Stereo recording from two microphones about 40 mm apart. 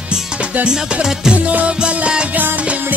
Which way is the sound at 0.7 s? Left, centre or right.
Centre.